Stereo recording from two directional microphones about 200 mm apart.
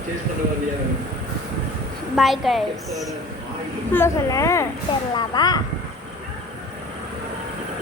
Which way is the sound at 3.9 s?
15° left (ahead or behind).